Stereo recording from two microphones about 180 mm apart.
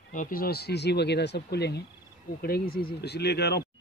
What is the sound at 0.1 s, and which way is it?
Speech, 50° left (ahead or behind).